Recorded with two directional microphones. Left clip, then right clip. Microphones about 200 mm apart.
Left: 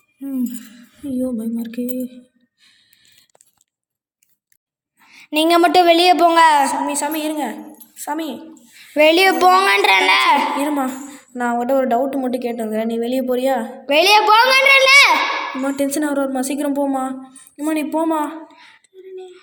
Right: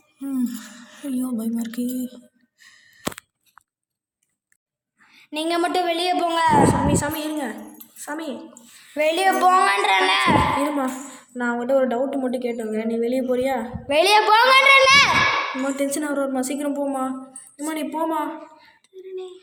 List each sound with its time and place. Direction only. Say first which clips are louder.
0.3 s a child's voice: left 2 dB; 10° left (ahead or behind)
2.6 s a sound: right 3 dB; 10° left (ahead or behind)
5.0 s a woman's voice: left 9 dB; 35° left (ahead or behind)
6.8 s a woman's voice: left 2 dB; 25° left (ahead or behind)
10.8 s a woman's voice: left 3 dB; 35° left (ahead or behind)
13.8 s a child's voice: left 4 dB; 15° left (ahead or behind)
19.0 s a sound: right 1 dB; 15° right (ahead or behind)